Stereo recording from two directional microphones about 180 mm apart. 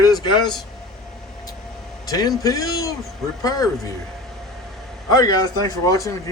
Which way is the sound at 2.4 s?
20° left (ahead or behind).